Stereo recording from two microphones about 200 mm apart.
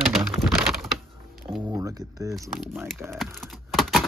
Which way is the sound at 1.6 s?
20° right (ahead or behind).